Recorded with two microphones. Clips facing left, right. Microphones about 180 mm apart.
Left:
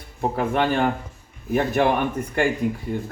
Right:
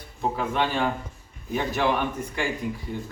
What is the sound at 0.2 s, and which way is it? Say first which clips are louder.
Speech: left 4 dB; 55° left (ahead or behind).